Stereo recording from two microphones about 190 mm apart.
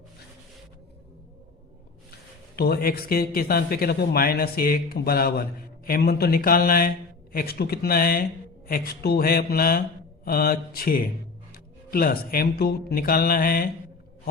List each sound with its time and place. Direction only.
2.6 s speech: 55° left (ahead or behind)